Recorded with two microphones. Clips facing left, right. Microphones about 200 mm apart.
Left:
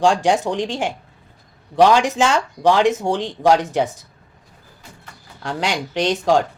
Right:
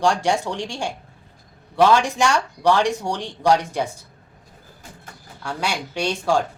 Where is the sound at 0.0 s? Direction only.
15° left (ahead or behind).